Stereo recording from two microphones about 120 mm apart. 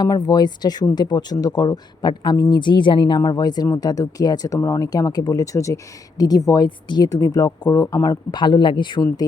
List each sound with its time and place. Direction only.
0.0 s speech: 30° left (ahead or behind)
8.3 s speech: 40° left (ahead or behind)